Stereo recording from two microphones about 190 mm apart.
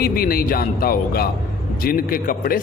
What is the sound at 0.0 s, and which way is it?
A man's voice, 50° left (ahead or behind).